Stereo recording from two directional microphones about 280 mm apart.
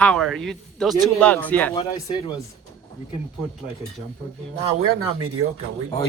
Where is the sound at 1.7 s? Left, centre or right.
Centre.